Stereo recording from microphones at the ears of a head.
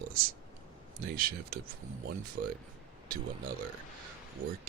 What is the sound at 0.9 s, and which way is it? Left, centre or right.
Speech, right.